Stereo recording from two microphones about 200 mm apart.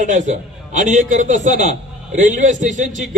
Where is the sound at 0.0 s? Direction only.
40° right (ahead or behind).